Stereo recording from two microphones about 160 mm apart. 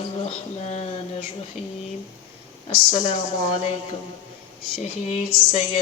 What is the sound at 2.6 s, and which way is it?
Speech, 40° left (ahead or behind).